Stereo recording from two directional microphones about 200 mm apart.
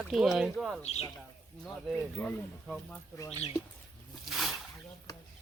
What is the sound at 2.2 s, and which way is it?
Speech, 10° left (ahead or behind).